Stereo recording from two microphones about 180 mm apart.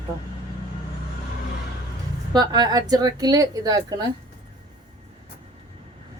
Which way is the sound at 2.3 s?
20° right (ahead or behind).